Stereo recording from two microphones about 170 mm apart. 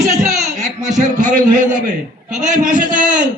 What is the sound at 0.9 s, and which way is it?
Speech, 50° right (ahead or behind).